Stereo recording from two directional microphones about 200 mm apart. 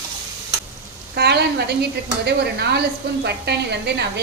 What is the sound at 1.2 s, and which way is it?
A woman's voice, 55° right (ahead or behind).